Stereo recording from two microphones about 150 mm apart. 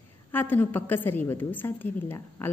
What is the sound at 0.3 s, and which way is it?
A woman's voice, 15° left (ahead or behind).